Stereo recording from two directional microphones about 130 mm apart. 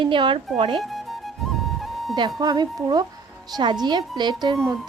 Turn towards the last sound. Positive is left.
turn(degrees=-35)  # may be behind; listen again after turning